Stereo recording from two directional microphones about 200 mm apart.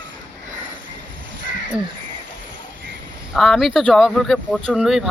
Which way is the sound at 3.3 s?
Centre (ahead or behind).